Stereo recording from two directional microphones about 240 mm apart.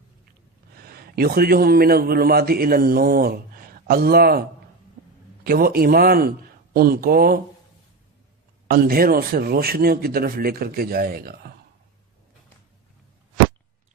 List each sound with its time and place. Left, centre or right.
0.8 s a man's voice: right
8.7 s a man's voice: right